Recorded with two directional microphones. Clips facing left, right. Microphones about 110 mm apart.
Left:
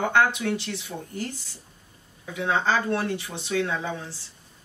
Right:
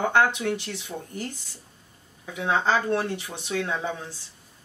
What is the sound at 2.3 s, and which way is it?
Speech, 20° right (ahead or behind).